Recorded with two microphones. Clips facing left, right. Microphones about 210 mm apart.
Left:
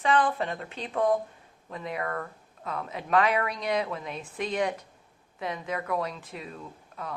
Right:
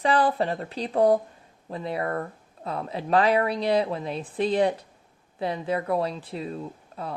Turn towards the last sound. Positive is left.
turn(degrees=-30)  # may be behind; listen again after turning